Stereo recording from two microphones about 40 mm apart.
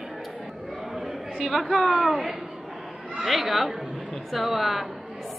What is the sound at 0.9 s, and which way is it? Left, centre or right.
A man's voice, centre.